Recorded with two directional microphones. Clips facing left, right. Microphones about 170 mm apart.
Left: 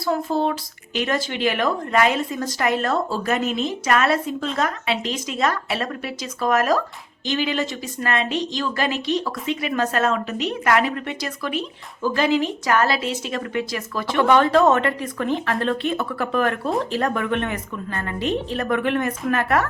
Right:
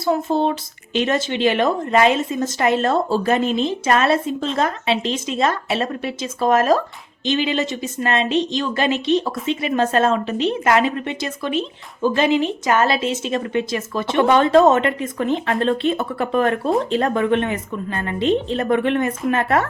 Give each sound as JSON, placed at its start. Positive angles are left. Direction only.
{"t": 0.0, "sound": "a woman's voice", "side_deg": -20}